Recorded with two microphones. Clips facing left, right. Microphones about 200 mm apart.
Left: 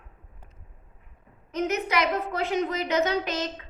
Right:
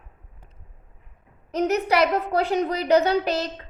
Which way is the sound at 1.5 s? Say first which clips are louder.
Right 5 dB; 35° right (ahead or behind).